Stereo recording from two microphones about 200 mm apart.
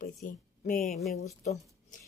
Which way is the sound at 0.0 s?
40° left (ahead or behind).